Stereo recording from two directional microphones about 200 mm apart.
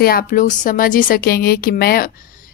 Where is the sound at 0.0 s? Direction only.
50° left (ahead or behind).